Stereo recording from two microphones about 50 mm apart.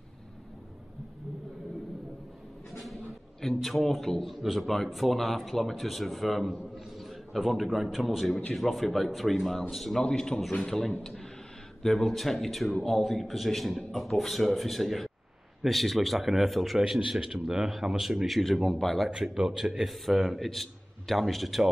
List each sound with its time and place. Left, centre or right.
2.8 s a sound: centre
4.8 s a man's voice: centre
10.0 s a man's voice: centre
19.0 s speech: centre
19.5 s a man's voice: centre